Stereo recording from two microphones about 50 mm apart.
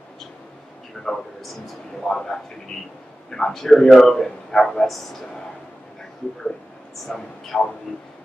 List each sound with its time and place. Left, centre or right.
1.0 s a man's voice: centre
7.1 s a man's voice: centre